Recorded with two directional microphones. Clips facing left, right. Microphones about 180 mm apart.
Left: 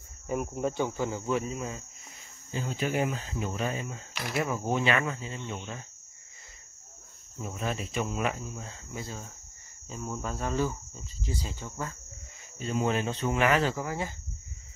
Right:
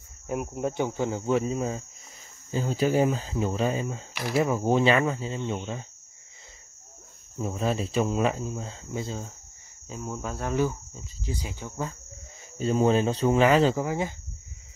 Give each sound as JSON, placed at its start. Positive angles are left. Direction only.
{"t": 0.3, "sound": "speech", "side_deg": -5}
{"t": 0.6, "sound": "speech", "side_deg": -15}
{"t": 7.3, "sound": "speech", "side_deg": -30}
{"t": 9.8, "sound": "speech", "side_deg": -10}
{"t": 12.5, "sound": "speech", "side_deg": -35}